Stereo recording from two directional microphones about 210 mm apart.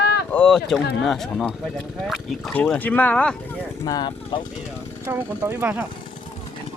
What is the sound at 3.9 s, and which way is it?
Speech, 20° left (ahead or behind).